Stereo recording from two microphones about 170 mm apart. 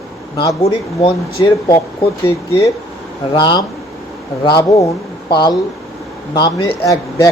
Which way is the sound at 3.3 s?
25° left (ahead or behind).